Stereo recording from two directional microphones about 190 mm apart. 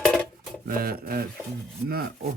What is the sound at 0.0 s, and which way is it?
Dishes, 5° left (ahead or behind).